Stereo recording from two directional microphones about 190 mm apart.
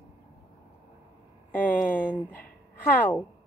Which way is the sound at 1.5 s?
10° left (ahead or behind).